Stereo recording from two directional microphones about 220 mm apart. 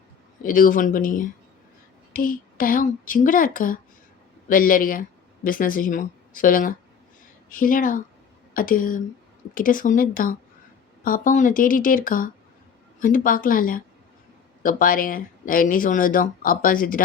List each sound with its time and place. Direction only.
0.4 s speech: 40° left (ahead or behind)